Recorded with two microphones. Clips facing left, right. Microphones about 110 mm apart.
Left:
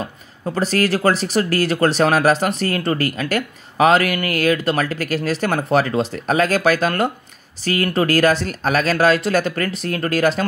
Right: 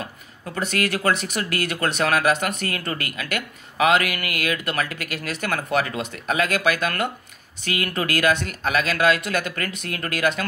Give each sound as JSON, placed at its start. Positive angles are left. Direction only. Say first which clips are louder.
{"t": 0.6, "sound": "speech", "louder": "left 6 dB", "side_deg": 35}